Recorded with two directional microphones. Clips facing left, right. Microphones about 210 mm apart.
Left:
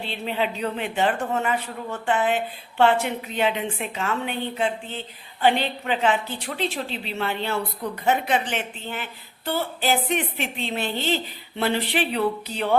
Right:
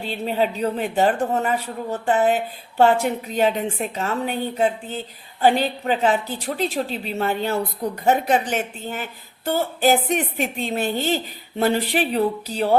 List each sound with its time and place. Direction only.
0.0 s a woman's voice: 40° right (ahead or behind)